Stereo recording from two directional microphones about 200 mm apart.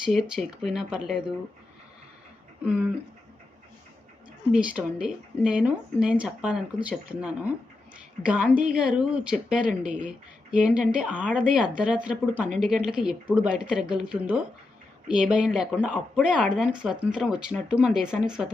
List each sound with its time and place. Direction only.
0.0 s speech: centre (ahead or behind)
2.6 s speech: 5° right (ahead or behind)
4.5 s speech: 5° right (ahead or behind)
9.6 s speech: 40° right (ahead or behind)
10.5 s speech: 5° right (ahead or behind)